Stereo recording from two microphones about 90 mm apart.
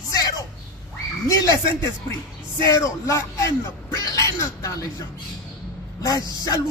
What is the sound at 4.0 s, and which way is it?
Music, 35° left (ahead or behind).